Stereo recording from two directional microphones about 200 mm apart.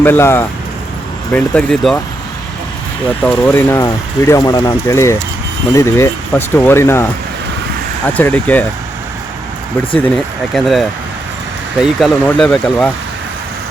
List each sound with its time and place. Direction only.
0.0 s speech: 10° left (ahead or behind)
3.2 s speech: 5° left (ahead or behind)
10.5 s speech: centre (ahead or behind)